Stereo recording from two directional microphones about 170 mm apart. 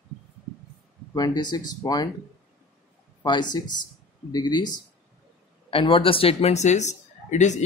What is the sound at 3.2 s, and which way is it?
Speech, 25° left (ahead or behind).